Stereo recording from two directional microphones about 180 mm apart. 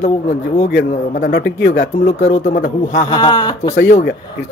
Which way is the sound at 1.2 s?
60° left (ahead or behind).